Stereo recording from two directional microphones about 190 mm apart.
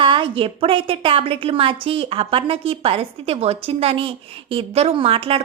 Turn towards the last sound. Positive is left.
turn(degrees=-30)  # may be behind; listen again after turning